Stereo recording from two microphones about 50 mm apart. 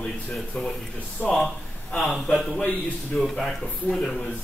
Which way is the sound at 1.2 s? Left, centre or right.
Left.